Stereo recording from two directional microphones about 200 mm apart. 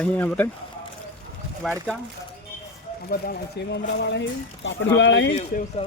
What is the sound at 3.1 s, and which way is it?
Speech, 50° left (ahead or behind).